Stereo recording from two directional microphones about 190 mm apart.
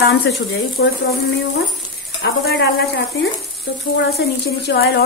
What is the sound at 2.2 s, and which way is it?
Speech, 65° left (ahead or behind).